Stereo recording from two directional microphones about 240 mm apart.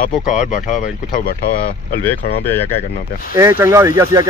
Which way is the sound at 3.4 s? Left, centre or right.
Centre.